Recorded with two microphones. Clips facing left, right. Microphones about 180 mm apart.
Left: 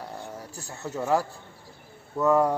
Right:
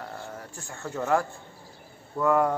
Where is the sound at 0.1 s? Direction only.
15° left (ahead or behind).